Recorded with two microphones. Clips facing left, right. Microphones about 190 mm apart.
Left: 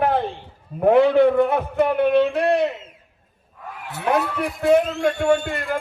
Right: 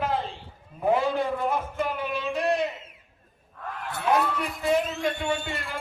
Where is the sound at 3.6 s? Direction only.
10° left (ahead or behind).